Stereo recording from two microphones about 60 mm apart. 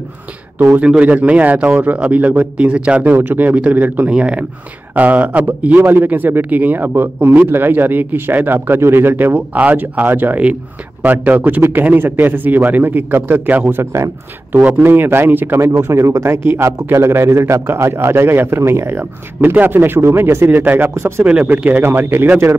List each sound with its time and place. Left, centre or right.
0.8 s a man's voice: right
3.0 s a man's voice: right
14.5 s a man's voice: right
15.8 s a man's voice: right
20.9 s a man's voice: right
21.5 s a man's voice: right